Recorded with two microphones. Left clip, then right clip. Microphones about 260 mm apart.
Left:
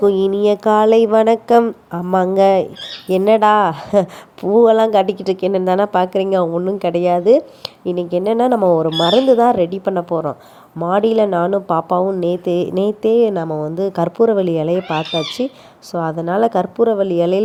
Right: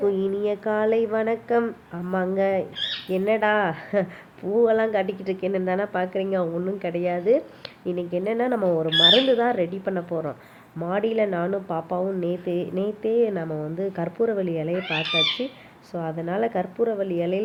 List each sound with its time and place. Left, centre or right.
0.0 s speech: left
8.7 s speech: centre
9.4 s speech: left
13.4 s speech: centre
13.7 s speech: left